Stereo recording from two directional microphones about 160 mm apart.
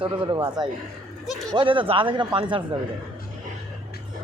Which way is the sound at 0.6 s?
25° right (ahead or behind).